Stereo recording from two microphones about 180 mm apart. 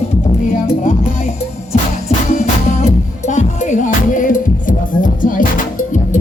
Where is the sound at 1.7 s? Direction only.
40° left (ahead or behind).